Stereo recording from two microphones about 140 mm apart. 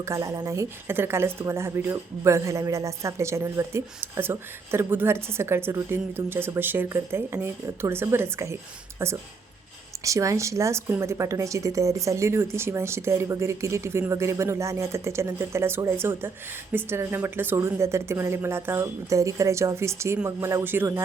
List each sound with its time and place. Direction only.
0.0 s a woman's voice: 20° right (ahead or behind)
10.0 s a woman's voice: 20° right (ahead or behind)